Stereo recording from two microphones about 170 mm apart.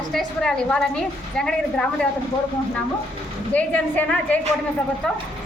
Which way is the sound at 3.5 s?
10° left (ahead or behind).